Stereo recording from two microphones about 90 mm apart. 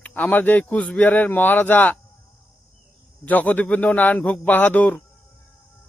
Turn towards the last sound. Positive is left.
turn(degrees=20)  # may be behind; listen again after turning